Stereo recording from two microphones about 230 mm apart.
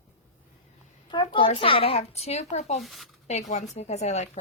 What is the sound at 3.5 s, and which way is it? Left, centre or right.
Speech, left.